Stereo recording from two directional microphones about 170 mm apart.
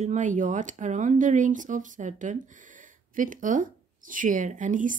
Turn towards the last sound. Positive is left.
turn(degrees=-50)  # may be behind; listen again after turning